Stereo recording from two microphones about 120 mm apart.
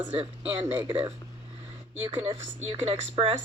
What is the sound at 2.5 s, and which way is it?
Speech, 55° right (ahead or behind).